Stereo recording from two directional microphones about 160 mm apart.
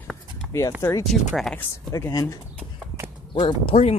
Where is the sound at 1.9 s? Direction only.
20° left (ahead or behind).